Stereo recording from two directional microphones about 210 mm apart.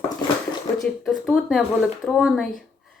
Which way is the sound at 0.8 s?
Centre (ahead or behind).